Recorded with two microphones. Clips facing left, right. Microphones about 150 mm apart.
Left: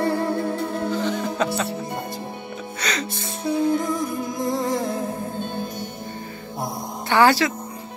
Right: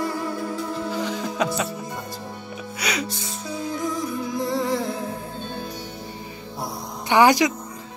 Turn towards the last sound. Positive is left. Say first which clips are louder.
# right 1 dB
turn(degrees=-15)  # may be behind; listen again after turning